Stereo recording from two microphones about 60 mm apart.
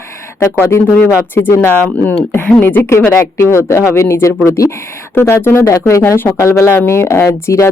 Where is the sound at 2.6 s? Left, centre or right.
Left.